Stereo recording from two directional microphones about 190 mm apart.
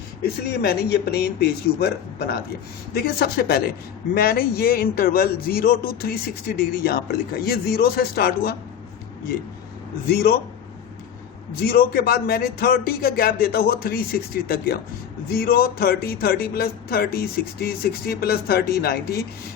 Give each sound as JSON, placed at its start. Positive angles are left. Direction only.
{"t": 0.2, "sound": "a man's voice", "side_deg": 55}
{"t": 10.1, "sound": "a man's voice", "side_deg": 55}
{"t": 11.6, "sound": "a man's voice", "side_deg": 50}